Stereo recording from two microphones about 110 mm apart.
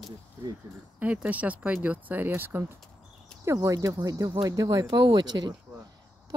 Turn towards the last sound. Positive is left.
turn(degrees=-40)  # may be behind; listen again after turning